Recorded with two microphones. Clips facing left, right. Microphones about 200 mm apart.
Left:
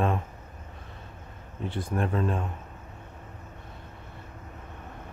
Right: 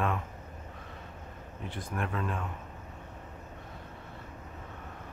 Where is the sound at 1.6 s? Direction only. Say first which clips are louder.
Left 7 dB; 30° left (ahead or behind).